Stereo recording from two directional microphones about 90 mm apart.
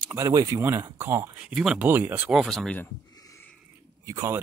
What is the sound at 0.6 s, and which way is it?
Speech, 30° right (ahead or behind).